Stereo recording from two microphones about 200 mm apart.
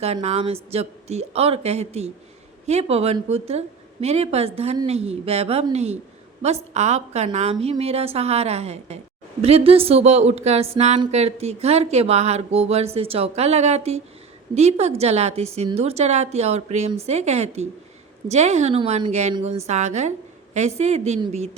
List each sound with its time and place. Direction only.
0.0 s a woman's voice: 30° right (ahead or behind)